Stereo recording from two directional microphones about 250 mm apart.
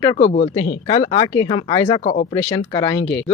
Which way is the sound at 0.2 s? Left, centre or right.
Left.